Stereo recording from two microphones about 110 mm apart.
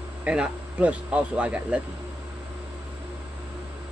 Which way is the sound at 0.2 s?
10° right (ahead or behind).